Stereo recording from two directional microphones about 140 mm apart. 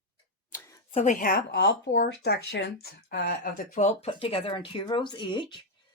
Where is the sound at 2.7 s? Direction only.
90° left.